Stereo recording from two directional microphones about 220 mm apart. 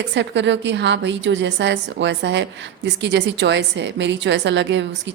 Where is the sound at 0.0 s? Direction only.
50° right (ahead or behind).